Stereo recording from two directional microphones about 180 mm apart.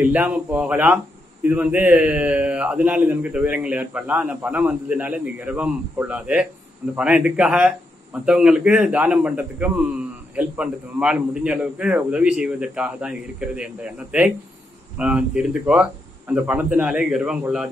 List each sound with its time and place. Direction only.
0.0 s a man's voice: 10° right (ahead or behind)